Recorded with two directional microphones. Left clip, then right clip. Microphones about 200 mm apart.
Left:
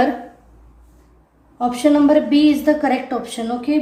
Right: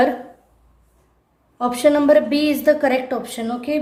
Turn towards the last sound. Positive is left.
turn(degrees=-45)  # may be behind; listen again after turning